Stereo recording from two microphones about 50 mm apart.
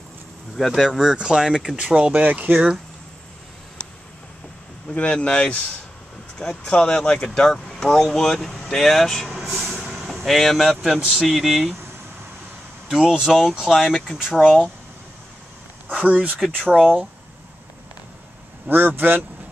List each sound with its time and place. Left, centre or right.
0.6 s speech: centre
1.9 s speech: right
4.9 s speech: left
7.5 s speech: centre
11.0 s speech: centre
11.2 s speech: centre
12.8 s speech: centre
14.1 s speech: centre
15.9 s speech: right
16.7 s speech: centre
18.7 s speech: right